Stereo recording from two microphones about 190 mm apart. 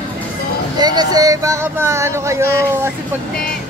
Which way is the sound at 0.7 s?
20° right (ahead or behind).